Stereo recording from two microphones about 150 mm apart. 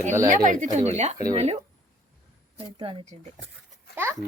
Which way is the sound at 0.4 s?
55° right (ahead or behind).